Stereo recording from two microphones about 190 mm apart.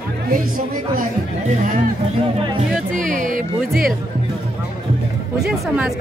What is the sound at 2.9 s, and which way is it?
Music, 45° right (ahead or behind).